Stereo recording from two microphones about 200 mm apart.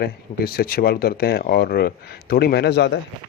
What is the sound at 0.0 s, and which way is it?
Speech, 50° left (ahead or behind).